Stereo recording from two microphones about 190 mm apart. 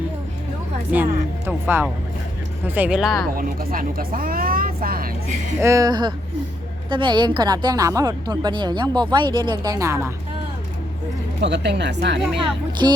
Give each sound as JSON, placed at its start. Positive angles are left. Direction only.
{"t": 1.5, "sound": "speech", "side_deg": -10}
{"t": 3.3, "sound": "speech", "side_deg": -50}
{"t": 5.5, "sound": "a woman's voice", "side_deg": -15}
{"t": 11.3, "sound": "speech", "side_deg": -65}
{"t": 12.8, "sound": "a woman's voice", "side_deg": -20}